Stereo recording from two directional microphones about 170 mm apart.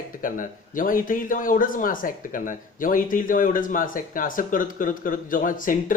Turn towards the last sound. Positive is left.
turn(degrees=50)  # may be behind; listen again after turning